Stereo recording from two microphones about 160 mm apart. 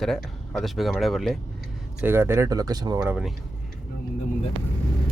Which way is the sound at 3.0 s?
5° right (ahead or behind).